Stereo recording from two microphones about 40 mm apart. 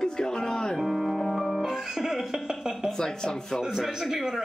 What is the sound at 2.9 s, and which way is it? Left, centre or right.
Speech, centre.